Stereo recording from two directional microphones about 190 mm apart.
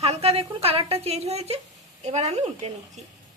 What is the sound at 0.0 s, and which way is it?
A woman's voice, 35° right (ahead or behind).